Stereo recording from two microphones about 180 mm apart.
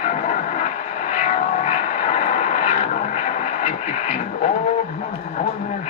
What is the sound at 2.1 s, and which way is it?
Vehicle, 40° left (ahead or behind).